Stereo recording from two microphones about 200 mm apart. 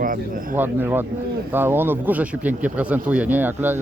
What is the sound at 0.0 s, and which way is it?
Speech, 45° right (ahead or behind).